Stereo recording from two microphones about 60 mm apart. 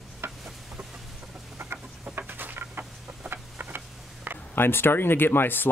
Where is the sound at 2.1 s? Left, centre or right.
Right.